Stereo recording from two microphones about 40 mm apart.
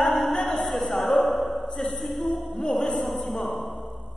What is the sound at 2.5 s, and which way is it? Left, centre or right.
Speech, centre.